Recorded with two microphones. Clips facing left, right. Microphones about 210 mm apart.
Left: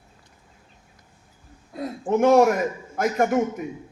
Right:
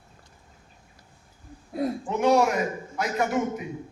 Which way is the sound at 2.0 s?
50° left (ahead or behind).